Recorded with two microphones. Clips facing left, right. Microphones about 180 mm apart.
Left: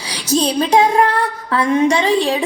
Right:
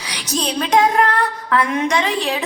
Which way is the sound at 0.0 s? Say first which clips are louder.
Left 6 dB; 30° left (ahead or behind).